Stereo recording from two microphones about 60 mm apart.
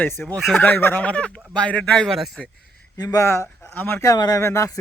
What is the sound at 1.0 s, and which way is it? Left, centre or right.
Speech, centre.